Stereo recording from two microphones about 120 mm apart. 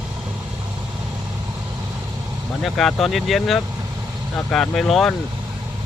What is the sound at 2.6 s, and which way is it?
Speech, centre (ahead or behind).